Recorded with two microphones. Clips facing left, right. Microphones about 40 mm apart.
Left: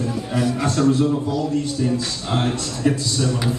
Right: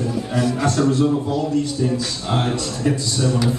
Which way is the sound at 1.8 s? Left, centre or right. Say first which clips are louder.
Even; centre.